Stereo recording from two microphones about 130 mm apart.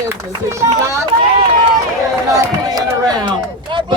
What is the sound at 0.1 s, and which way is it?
Speech, 20° right (ahead or behind).